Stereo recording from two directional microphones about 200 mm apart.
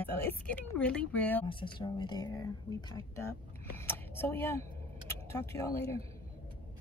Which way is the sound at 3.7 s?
10° left (ahead or behind).